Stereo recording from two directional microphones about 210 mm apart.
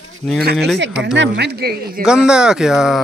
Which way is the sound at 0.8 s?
60° right (ahead or behind).